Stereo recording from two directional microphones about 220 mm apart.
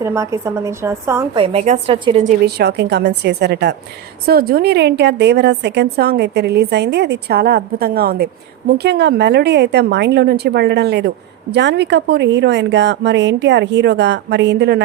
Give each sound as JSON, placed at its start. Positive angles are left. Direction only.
{"t": 0.0, "sound": "a woman's voice", "side_deg": -15}
{"t": 1.4, "sound": "a woman's voice", "side_deg": -30}
{"t": 2.5, "sound": "a woman's voice", "side_deg": -50}